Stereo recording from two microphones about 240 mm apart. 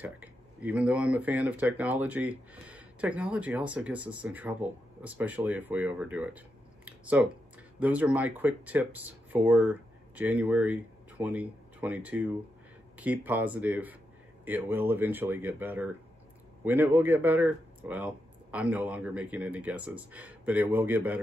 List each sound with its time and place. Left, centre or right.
0.0 s speech: centre